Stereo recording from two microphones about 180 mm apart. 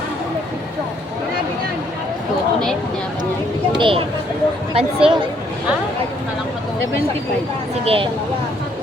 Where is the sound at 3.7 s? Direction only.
30° right (ahead or behind).